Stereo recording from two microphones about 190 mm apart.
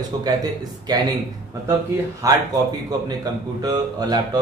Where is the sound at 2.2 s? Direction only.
15° right (ahead or behind).